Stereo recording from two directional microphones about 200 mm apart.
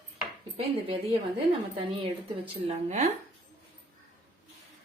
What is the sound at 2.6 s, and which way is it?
Speech, 35° right (ahead or behind).